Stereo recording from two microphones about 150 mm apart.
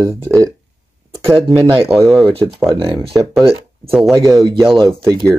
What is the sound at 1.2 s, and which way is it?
Speech, 40° right (ahead or behind).